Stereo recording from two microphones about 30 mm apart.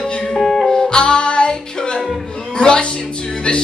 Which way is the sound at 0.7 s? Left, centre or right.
Left.